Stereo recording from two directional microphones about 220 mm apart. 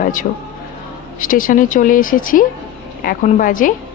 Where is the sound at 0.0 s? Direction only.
35° left (ahead or behind).